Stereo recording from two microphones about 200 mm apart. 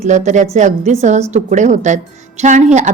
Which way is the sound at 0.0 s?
35° right (ahead or behind).